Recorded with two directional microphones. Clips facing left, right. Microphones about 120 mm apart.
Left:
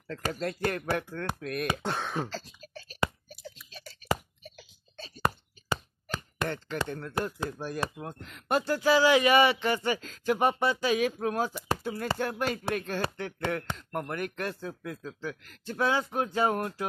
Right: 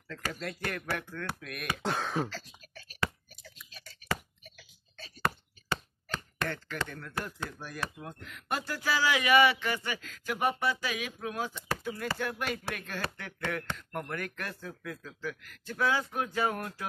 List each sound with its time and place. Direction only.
0.3 s speech: 35° left (ahead or behind)
1.8 s speech: centre (ahead or behind)
2.2 s throat clearing: 30° left (ahead or behind)
4.4 s a sound: 30° left (ahead or behind)
5.2 s chopping: 10° left (ahead or behind)
6.9 s speech: 25° left (ahead or behind)
11.0 s speech: 40° left (ahead or behind)